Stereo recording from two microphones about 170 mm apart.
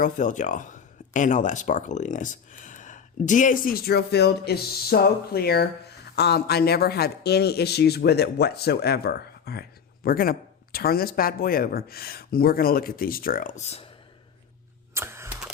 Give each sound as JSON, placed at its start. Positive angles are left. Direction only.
{"t": 0.0, "sound": "speech", "side_deg": 45}
{"t": 14.9, "sound": "camera", "side_deg": -15}